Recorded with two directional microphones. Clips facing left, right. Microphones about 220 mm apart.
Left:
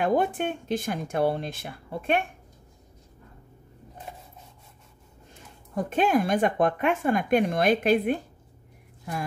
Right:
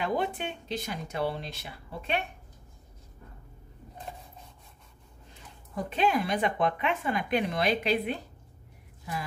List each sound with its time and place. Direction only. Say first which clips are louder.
0.0 s speech: left 6 dB; 50° left (ahead or behind)
5.3 s speech: left 6 dB; 45° left (ahead or behind)